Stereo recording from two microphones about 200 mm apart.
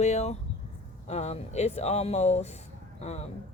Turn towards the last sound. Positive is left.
turn(degrees=35)  # may be behind; listen again after turning